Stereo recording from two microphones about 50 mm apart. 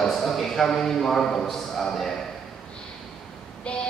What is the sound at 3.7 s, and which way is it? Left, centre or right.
Female singing, left.